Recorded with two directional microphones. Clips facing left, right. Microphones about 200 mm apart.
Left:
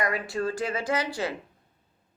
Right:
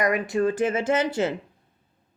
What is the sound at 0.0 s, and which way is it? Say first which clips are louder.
Speech: right 6 dB; 20° right (ahead or behind).